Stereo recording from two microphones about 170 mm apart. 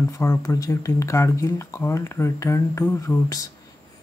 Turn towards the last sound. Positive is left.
turn(degrees=20)  # may be behind; listen again after turning